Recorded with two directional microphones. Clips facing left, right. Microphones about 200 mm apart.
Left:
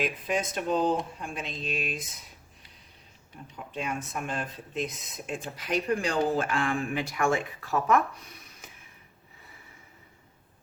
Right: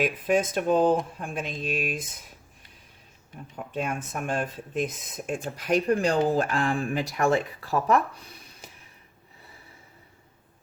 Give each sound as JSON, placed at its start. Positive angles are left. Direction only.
{"t": 0.0, "sound": "speech", "side_deg": -50}
{"t": 3.5, "sound": "speech", "side_deg": -50}